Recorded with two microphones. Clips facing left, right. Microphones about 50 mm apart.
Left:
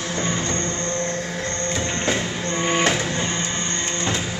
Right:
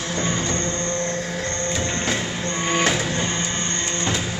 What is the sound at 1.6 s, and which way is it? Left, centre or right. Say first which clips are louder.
Printer: left 2 dB; centre.